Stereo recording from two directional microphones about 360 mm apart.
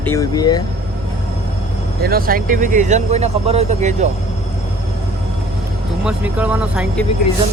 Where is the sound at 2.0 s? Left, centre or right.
Right.